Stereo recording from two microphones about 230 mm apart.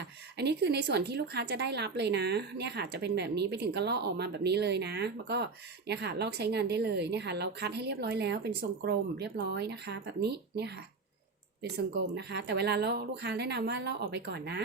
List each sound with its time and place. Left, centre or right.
0.0 s speech: right
12.1 s speech: right